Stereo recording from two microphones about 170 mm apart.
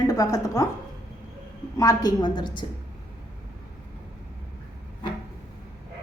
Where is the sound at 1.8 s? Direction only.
20° left (ahead or behind).